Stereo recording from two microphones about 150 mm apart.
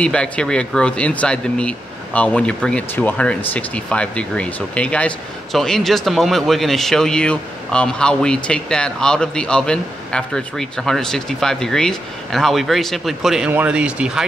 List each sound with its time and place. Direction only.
0.0 s speech: 5° left (ahead or behind)